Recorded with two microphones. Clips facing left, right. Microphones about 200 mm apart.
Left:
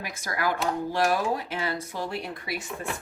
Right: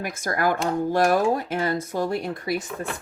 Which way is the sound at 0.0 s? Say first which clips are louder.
Right 5 dB; 50° right (ahead or behind).